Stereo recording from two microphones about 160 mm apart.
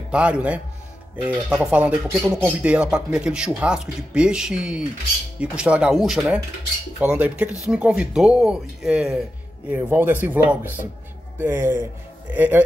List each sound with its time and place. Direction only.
0.1 s speech: 10° right (ahead or behind)